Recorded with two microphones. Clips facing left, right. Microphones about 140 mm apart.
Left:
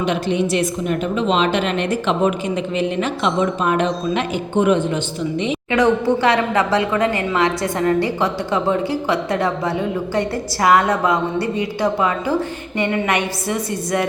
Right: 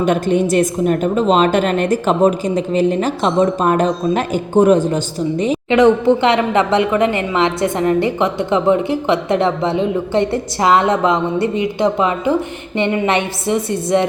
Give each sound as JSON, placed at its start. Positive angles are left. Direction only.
{"t": 0.0, "sound": "a woman's voice", "side_deg": -45}
{"t": 5.7, "sound": "a woman's voice", "side_deg": -20}